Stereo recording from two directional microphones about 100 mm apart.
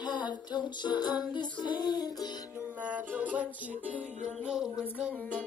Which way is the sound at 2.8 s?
15° right (ahead or behind).